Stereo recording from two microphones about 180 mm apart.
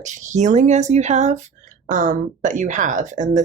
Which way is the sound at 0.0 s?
45° right (ahead or behind).